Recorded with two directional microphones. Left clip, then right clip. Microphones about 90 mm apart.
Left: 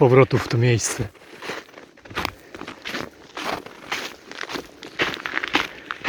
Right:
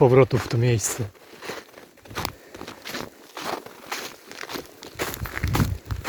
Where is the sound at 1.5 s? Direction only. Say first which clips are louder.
Left 3 dB; 65° right (ahead or behind).